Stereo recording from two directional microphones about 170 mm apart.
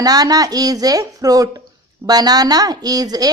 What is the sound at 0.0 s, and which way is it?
Speech, 20° right (ahead or behind).